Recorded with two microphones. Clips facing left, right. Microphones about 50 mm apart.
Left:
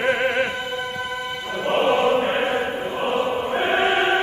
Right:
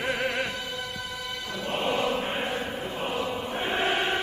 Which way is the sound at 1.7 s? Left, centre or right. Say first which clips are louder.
Left 9 dB; left.